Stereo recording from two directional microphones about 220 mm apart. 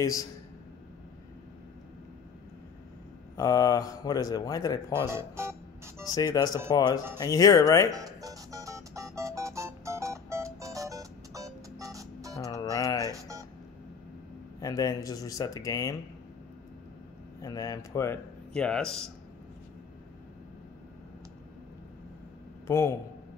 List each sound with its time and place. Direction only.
0.0 s speech: 15° left (ahead or behind)
3.3 s speech: 15° left (ahead or behind)
5.1 s music: 10° right (ahead or behind)
6.0 s speech: 15° left (ahead or behind)
7.9 s music: 15° right (ahead or behind)
12.4 s music: 15° left (ahead or behind)
13.1 s music: 15° right (ahead or behind)
14.6 s speech: 15° left (ahead or behind)
17.4 s speech: 15° left (ahead or behind)
22.7 s speech: 10° left (ahead or behind)